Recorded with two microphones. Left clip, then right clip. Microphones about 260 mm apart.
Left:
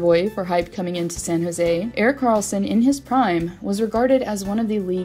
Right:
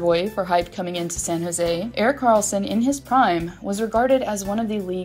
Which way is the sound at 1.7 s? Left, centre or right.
Left.